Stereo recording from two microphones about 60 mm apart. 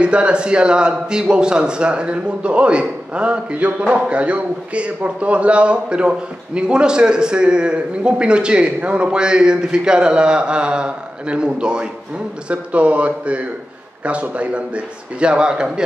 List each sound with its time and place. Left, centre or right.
0.0 s a man's voice: centre